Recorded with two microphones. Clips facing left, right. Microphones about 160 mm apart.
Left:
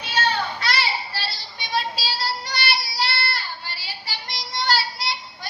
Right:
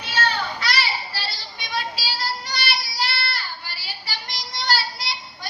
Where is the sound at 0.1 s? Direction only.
25° left (ahead or behind).